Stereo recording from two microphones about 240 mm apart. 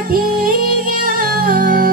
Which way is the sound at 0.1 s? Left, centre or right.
Right.